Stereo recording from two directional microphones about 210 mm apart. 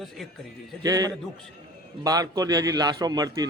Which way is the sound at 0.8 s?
15° right (ahead or behind).